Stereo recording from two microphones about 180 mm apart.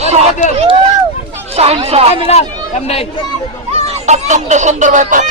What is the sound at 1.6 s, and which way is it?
Speech, 35° right (ahead or behind).